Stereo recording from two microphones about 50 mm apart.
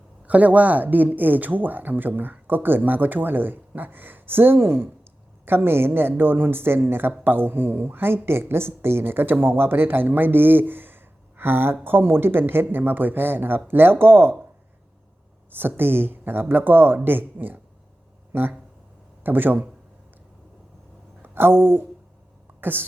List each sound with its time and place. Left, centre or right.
0.3 s speech: right
15.4 s speech: right
21.2 s speech: right